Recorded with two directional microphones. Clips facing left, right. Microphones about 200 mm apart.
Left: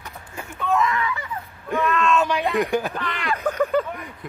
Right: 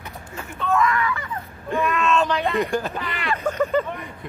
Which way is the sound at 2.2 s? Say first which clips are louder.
Even; 5° left (ahead or behind).